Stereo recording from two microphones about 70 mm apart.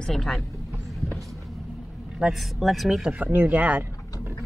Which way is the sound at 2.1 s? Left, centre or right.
Centre.